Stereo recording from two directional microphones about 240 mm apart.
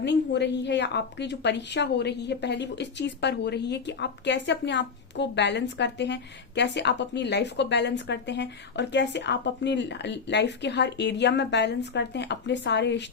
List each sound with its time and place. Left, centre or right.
0.0 s speech: left